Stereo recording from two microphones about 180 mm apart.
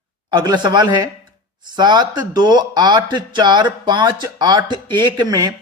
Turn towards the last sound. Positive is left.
turn(degrees=-20)  # may be behind; listen again after turning